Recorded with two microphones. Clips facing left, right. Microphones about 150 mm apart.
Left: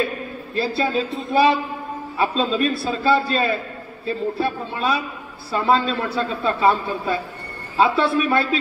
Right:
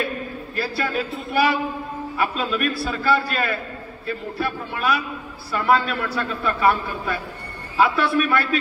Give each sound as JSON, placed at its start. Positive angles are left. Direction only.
{"t": 0.6, "sound": "a man's voice", "side_deg": 25}